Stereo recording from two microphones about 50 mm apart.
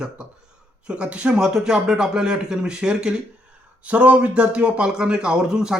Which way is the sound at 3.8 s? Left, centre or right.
Right.